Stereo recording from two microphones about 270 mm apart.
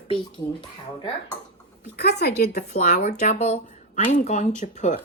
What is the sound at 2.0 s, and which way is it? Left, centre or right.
Speech, left.